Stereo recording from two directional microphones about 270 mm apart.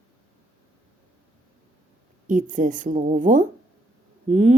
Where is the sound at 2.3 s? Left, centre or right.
Right.